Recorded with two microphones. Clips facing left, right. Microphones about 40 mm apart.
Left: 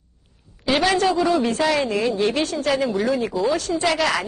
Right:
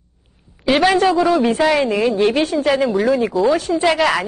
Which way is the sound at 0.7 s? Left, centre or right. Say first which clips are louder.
Right 5 dB; centre.